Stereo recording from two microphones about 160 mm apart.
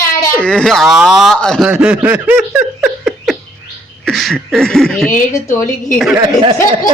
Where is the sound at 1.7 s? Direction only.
10° right (ahead or behind).